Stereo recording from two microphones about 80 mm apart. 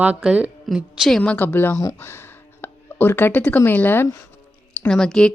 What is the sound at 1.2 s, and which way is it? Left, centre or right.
Speech, centre.